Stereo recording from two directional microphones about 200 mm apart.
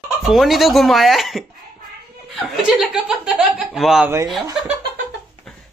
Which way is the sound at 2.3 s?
Centre (ahead or behind).